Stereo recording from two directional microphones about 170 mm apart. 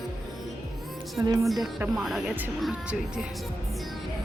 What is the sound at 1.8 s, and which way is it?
Speech, centre (ahead or behind).